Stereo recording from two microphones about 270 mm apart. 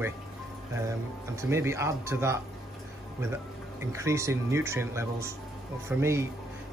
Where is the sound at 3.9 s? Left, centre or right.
Centre.